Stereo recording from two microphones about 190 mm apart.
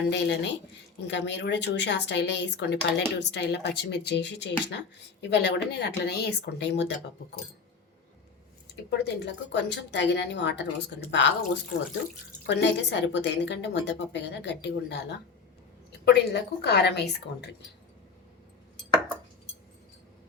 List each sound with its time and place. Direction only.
0.1 s a woman's voice: 65° left (ahead or behind)
8.7 s a woman's voice: 60° left (ahead or behind)